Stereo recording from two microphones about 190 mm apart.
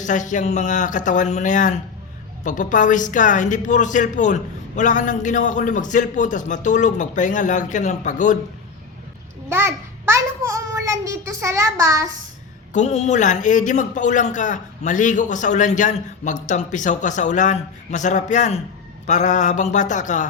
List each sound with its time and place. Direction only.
0.0 s a man's voice: 40° left (ahead or behind)
9.5 s a sound: 15° right (ahead or behind)
12.7 s a man's voice: 40° left (ahead or behind)